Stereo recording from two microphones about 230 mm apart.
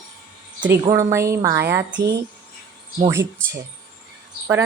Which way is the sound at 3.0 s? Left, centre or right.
Centre.